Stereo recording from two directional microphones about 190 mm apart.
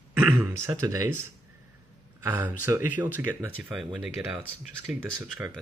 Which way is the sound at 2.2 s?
10° right (ahead or behind).